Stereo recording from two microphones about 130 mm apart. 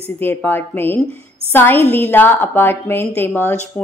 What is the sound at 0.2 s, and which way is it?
A woman's voice, 15° left (ahead or behind).